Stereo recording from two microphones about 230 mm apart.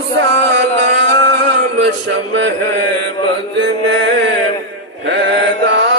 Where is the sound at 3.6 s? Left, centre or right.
Right.